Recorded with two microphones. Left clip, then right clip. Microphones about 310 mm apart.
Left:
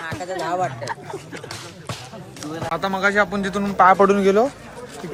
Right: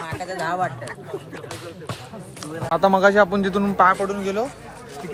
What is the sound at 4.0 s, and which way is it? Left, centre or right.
Speech, left.